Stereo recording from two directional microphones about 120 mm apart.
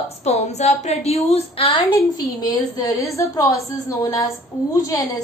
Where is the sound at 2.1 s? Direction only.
35° left (ahead or behind).